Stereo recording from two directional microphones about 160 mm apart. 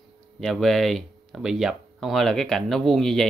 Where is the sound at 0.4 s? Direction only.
Centre (ahead or behind).